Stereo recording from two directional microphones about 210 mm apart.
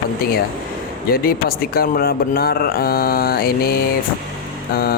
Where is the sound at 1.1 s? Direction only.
45° left (ahead or behind).